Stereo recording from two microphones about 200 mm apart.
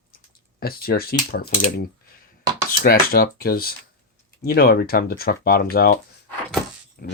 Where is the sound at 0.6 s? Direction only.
50° left (ahead or behind).